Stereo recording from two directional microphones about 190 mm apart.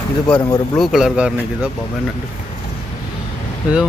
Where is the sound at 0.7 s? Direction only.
Centre (ahead or behind).